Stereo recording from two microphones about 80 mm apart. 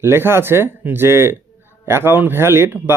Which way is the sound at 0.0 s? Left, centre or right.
Right.